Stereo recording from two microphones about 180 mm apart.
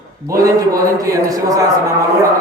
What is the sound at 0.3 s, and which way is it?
A man's voice, 20° right (ahead or behind).